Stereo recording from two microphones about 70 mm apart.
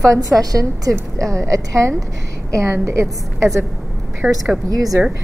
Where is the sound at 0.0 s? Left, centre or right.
Right.